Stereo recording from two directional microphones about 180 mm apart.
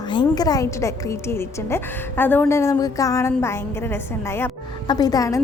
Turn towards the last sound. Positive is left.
turn(degrees=20)  # may be behind; listen again after turning